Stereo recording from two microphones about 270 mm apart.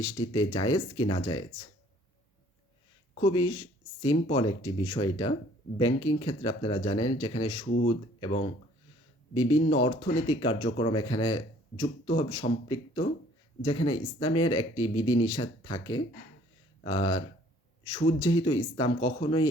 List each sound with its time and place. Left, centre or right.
0.0 s speech: centre
3.2 s speech: centre
9.3 s speech: centre